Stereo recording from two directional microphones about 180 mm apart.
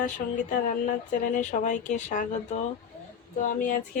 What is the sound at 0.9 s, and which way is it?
Speech, 45° left (ahead or behind).